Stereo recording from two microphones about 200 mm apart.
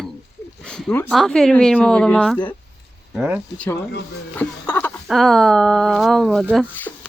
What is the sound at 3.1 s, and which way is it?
Speech, 10° right (ahead or behind).